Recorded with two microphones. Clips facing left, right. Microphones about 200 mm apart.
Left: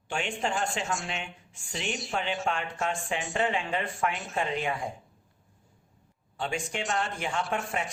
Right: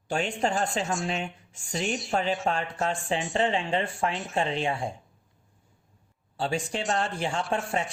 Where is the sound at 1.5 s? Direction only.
40° right (ahead or behind).